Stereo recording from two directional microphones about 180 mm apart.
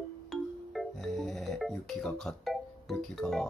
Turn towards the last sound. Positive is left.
turn(degrees=0)  # may be behind; listen again after turning